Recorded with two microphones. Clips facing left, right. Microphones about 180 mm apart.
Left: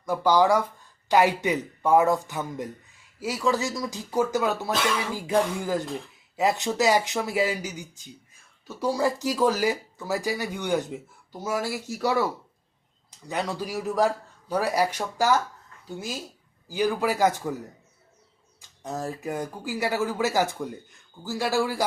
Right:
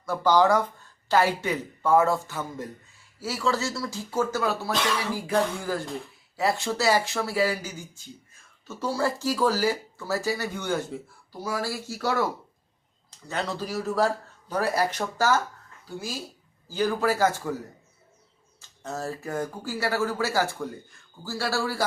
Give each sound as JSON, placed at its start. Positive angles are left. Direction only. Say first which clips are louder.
{"t": 0.0, "sound": "speech", "louder": "even", "side_deg": 15}
{"t": 16.6, "sound": "speech", "louder": "even", "side_deg": 15}
{"t": 18.8, "sound": "speech", "louder": "left 1 dB", "side_deg": 15}